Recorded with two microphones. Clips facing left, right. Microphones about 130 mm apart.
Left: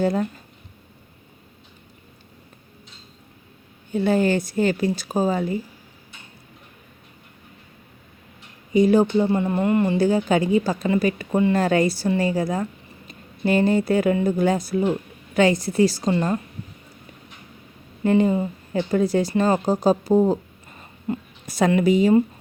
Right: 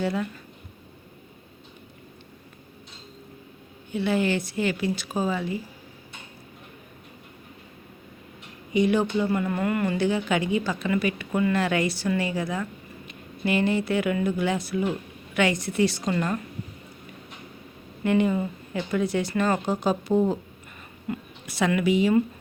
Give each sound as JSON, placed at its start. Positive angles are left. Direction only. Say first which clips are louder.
{"t": 0.0, "sound": "a woman's voice", "louder": "left 5 dB", "side_deg": 40}
{"t": 3.9, "sound": "speech", "louder": "left 5 dB", "side_deg": 45}
{"t": 8.7, "sound": "speech", "louder": "left 6 dB", "side_deg": 35}
{"t": 10.0, "sound": "a woman's voice", "louder": "left 5 dB", "side_deg": 40}
{"t": 16.1, "sound": "speech", "louder": "left 4 dB", "side_deg": 25}
{"t": 18.0, "sound": "a woman's voice", "louder": "left 4 dB", "side_deg": 35}
{"t": 21.4, "sound": "a woman's voice", "louder": "left 5 dB", "side_deg": 40}